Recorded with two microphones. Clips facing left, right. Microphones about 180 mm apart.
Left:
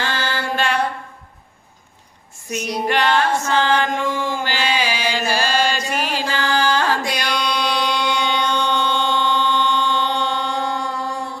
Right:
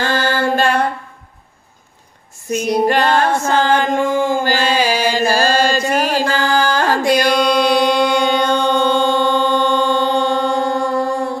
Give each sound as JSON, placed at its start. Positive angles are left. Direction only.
{"t": 0.0, "sound": "mantra", "side_deg": -45}
{"t": 2.5, "sound": "mantra", "side_deg": -50}